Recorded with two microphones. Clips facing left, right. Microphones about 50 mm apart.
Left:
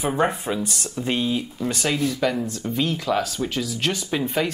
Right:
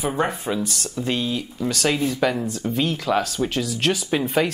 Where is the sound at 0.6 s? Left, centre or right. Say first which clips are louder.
Right 1 dB; right.